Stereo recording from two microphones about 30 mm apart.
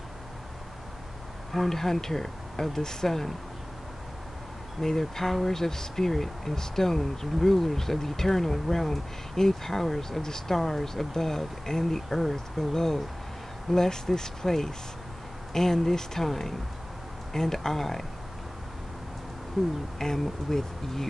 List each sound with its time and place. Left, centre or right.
1.5 s speech: centre
4.8 s speech: centre
19.6 s speech: centre
20.0 s speech: centre